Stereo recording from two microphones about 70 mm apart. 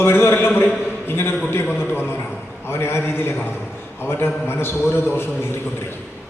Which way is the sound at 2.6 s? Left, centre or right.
Left.